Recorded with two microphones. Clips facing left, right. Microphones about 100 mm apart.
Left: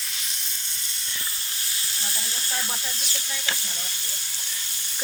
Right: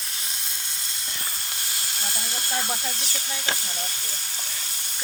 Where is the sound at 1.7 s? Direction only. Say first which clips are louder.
Right 2 dB; 55° right (ahead or behind).